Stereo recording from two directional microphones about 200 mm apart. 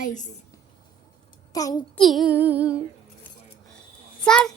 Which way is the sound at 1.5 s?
20° left (ahead or behind).